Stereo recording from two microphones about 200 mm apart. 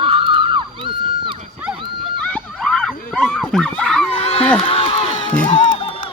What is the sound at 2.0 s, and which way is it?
Horse, 5° left (ahead or behind).